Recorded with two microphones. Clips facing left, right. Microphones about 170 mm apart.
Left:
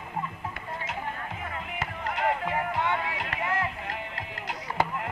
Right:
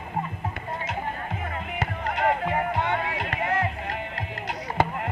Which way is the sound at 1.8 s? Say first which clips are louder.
Right 4 dB; 65° right (ahead or behind).